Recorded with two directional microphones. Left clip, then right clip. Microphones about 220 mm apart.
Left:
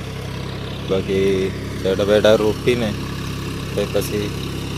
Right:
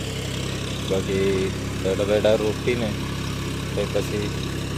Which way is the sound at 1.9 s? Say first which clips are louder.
Left 6 dB; 20° left (ahead or behind).